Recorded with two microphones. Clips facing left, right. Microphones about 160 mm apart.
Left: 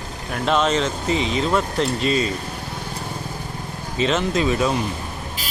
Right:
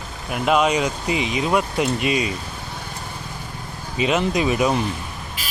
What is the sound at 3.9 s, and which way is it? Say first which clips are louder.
Speech: even; 10° right (ahead or behind).